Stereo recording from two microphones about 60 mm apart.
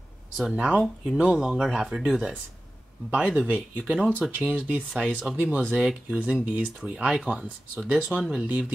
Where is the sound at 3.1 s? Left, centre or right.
Right.